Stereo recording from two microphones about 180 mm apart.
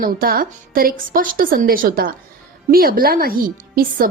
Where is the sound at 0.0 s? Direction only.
55° right (ahead or behind).